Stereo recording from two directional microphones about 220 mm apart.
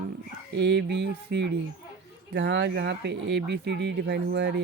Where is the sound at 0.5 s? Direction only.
50° right (ahead or behind).